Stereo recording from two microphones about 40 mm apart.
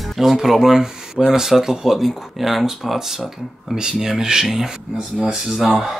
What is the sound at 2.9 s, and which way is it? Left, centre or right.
Speech, centre.